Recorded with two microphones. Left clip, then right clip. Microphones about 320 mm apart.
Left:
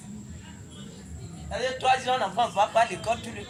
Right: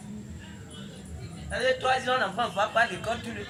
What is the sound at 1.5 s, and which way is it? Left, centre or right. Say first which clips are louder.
A man's voice: left 1 dB; left.